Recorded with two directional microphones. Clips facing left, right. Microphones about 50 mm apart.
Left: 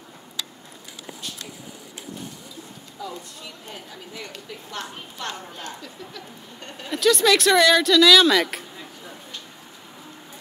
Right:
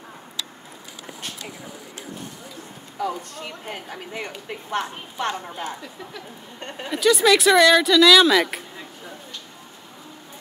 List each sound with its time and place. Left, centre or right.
3.0 s speech: right
4.5 s speech: right
4.9 s a woman's voice: centre
6.9 s speech: centre